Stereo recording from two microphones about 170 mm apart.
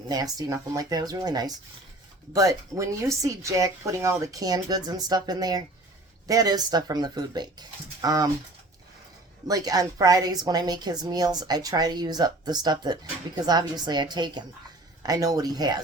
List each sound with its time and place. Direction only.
0.1 s a woman's voice: 20° right (ahead or behind)
9.5 s a woman's voice: 20° right (ahead or behind)